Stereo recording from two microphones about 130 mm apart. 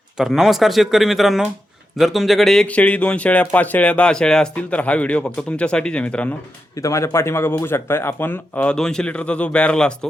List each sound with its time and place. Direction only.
0.2 s a man's voice: centre (ahead or behind)
6.7 s a man's voice: 25° left (ahead or behind); by 10.1 s 5° left (ahead or behind)